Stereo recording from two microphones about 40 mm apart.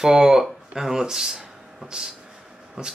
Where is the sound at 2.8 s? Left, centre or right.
Right.